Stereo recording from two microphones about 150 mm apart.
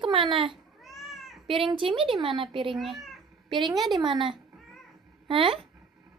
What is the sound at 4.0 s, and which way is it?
A woman's voice, 35° right (ahead or behind).